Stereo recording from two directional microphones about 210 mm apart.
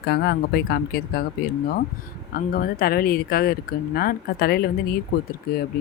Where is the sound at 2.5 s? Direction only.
45° left (ahead or behind).